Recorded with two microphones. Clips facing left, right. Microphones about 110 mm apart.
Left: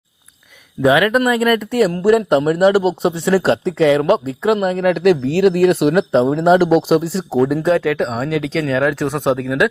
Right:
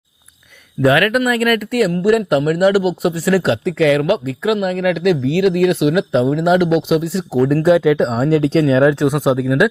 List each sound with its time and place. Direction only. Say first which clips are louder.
0.9 s speech: left 1 dB; 20° left (ahead or behind); by 6.7 s 35° left (ahead or behind)
6.7 s speech: left 2 dB; centre (ahead or behind)
7.1 s speech: even; 30° left (ahead or behind)
7.4 s speech: right 4 dB; 5° left (ahead or behind)
8.7 s speech: right 2 dB; 20° right (ahead or behind)
9.1 s speech: right 2 dB; 5° right (ahead or behind)